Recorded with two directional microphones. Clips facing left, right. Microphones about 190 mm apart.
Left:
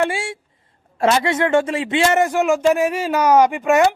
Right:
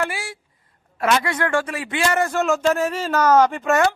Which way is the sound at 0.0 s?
25° left (ahead or behind).